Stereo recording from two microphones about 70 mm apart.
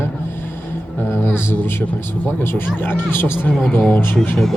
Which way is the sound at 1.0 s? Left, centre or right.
Left.